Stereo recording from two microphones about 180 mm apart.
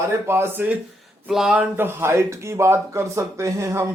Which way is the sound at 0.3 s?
15° right (ahead or behind).